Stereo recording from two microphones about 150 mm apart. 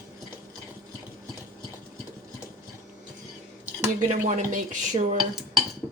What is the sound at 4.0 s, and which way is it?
Speech, 55° right (ahead or behind).